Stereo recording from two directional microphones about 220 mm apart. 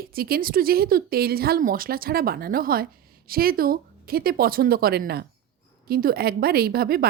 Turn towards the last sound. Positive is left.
turn(degrees=-45)  # may be behind; listen again after turning